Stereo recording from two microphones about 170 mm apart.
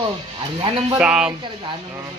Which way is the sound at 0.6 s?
30° right (ahead or behind).